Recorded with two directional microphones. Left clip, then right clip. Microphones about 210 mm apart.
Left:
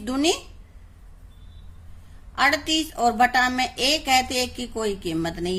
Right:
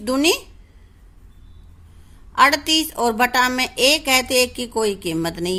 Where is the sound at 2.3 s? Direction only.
40° right (ahead or behind).